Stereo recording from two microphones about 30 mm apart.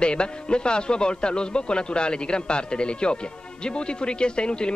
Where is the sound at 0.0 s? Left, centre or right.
Left.